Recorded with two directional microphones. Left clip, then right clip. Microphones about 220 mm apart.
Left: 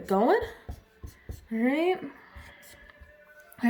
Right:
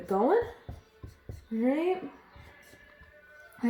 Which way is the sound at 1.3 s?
55° left (ahead or behind).